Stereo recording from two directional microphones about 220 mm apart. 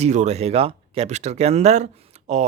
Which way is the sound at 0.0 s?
30° right (ahead or behind).